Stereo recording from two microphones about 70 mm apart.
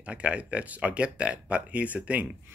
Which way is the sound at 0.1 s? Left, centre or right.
Centre.